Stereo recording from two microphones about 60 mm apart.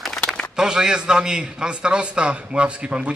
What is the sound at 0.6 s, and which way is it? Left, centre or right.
A man's voice, centre.